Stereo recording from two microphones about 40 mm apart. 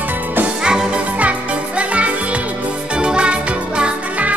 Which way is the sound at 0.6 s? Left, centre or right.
Centre.